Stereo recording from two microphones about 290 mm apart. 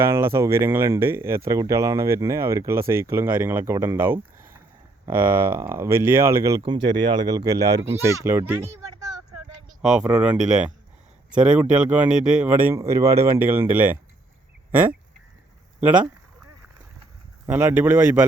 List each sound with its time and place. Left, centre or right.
0.0 s speech: centre
9.8 s speech: centre
17.4 s speech: centre